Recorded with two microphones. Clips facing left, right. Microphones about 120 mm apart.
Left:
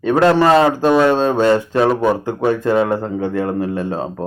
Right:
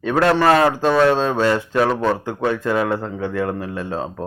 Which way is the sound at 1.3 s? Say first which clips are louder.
Left 4 dB; 25° left (ahead or behind).